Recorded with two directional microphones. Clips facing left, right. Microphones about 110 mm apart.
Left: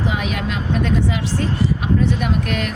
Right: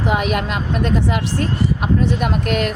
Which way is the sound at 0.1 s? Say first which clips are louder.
Right 4 dB; 55° right (ahead or behind).